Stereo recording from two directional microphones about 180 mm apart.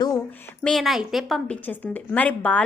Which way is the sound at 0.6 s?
Centre (ahead or behind).